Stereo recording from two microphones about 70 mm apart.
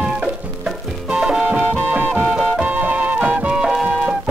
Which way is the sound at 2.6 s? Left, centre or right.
Right.